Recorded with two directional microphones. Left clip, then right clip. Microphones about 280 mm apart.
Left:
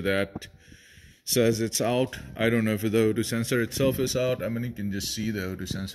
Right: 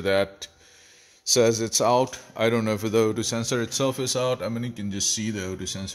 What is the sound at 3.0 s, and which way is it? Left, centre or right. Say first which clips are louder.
Speech: right 1 dB; centre.